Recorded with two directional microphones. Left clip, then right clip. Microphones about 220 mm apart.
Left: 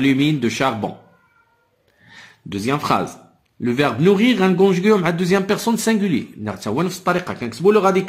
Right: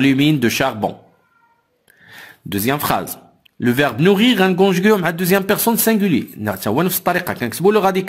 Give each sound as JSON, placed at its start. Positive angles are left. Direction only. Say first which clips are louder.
{"t": 0.0, "sound": "speech", "louder": "right 3 dB", "side_deg": -35}
{"t": 2.0, "sound": "a sound", "louder": "right 4 dB", "side_deg": -35}
{"t": 3.5, "sound": "a man's voice", "louder": "right 2 dB", "side_deg": -40}